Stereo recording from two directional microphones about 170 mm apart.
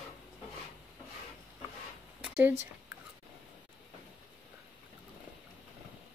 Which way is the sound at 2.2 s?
10° right (ahead or behind).